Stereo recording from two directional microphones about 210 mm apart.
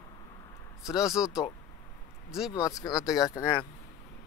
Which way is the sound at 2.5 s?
15° left (ahead or behind).